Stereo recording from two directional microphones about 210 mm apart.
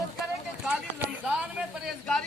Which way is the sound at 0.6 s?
5° right (ahead or behind).